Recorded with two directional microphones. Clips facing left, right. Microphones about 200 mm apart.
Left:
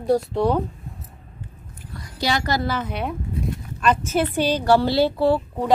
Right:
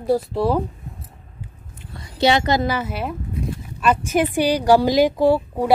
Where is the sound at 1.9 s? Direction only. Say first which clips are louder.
Right 7 dB; 25° right (ahead or behind).